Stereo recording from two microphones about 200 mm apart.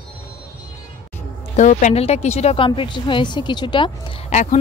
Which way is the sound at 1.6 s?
40° left (ahead or behind).